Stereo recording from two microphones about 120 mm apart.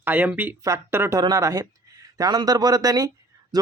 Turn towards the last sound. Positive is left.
turn(degrees=-30)  # may be behind; listen again after turning